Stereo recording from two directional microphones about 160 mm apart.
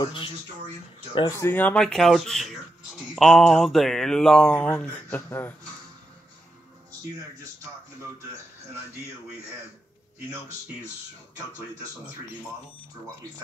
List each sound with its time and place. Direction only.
0.0 s speech: 30° left (ahead or behind)
1.4 s speech: 10° left (ahead or behind)